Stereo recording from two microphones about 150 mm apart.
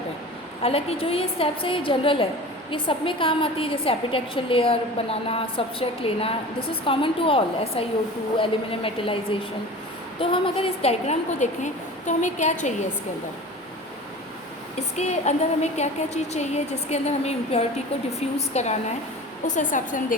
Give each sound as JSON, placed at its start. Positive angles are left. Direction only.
{"t": 0.6, "sound": "a woman's voice", "side_deg": 40}
{"t": 14.8, "sound": "a woman's voice", "side_deg": 50}